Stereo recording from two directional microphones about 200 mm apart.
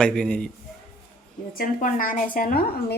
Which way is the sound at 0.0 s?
5° left (ahead or behind).